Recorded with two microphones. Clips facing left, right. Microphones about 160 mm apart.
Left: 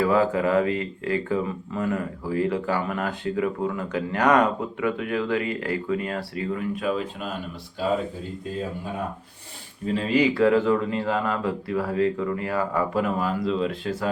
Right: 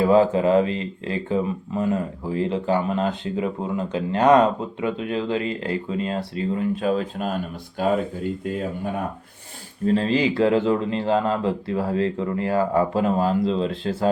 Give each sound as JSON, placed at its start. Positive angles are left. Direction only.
{"t": 0.0, "sound": "speech", "side_deg": -25}
{"t": 7.8, "sound": "speech", "side_deg": -55}
{"t": 9.8, "sound": "speech", "side_deg": -35}